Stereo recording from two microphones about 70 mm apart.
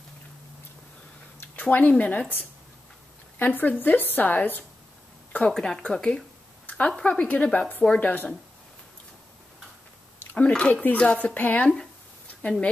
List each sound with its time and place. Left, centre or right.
1.4 s speech: left
3.3 s speech: left
5.3 s speech: centre
6.6 s a sound: left
6.9 s speech: centre
10.7 s speech: left